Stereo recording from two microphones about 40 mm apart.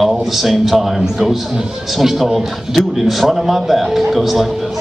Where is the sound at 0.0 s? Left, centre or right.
Centre.